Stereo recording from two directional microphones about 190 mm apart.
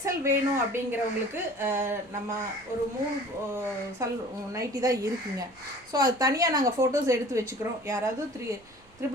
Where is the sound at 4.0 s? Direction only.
15° right (ahead or behind).